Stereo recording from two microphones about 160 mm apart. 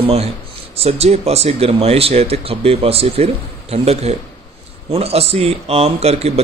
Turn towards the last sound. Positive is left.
turn(degrees=-40)  # may be behind; listen again after turning